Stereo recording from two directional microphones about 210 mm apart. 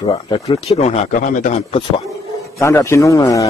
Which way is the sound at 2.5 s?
15° left (ahead or behind).